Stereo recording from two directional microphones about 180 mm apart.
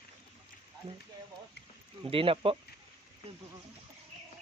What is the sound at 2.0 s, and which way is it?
Speech, 30° right (ahead or behind).